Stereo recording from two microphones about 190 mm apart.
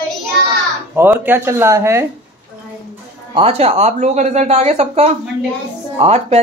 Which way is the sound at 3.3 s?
30° right (ahead or behind).